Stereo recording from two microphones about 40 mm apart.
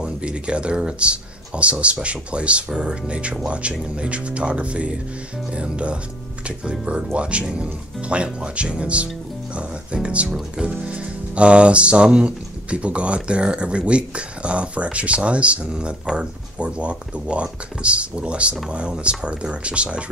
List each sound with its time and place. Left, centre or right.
0.0 s speech: right